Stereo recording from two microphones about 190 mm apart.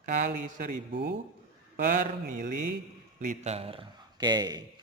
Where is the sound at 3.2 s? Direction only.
40° right (ahead or behind); by 4.6 s 20° right (ahead or behind).